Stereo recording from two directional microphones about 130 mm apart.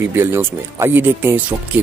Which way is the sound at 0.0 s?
15° right (ahead or behind).